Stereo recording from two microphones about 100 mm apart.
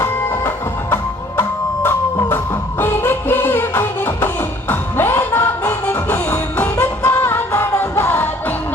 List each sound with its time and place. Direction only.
1.8 s music: 20° left (ahead or behind)